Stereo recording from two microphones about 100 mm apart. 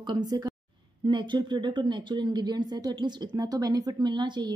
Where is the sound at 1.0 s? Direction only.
50° right (ahead or behind).